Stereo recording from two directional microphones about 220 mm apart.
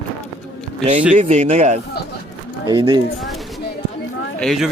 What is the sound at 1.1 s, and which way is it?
Speech, 30° right (ahead or behind).